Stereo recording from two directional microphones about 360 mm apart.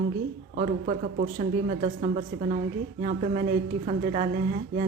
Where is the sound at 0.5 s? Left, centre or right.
Centre.